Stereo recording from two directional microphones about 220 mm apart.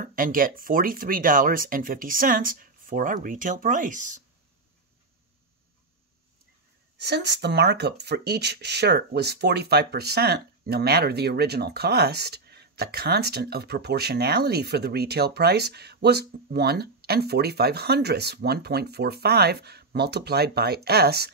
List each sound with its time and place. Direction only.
0.0 s speech: 40° right (ahead or behind)
7.0 s speech: 50° right (ahead or behind)